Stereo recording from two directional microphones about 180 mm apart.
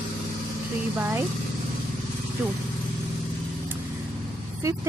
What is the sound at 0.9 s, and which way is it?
Speech, 10° right (ahead or behind).